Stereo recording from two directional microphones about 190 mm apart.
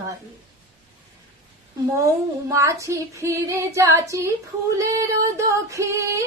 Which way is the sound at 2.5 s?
15° right (ahead or behind).